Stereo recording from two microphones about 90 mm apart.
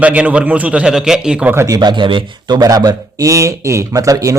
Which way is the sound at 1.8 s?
60° right (ahead or behind).